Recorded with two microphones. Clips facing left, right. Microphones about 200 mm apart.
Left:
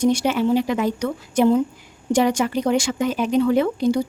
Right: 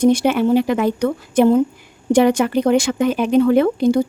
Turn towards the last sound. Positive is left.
turn(degrees=-55)  # may be behind; listen again after turning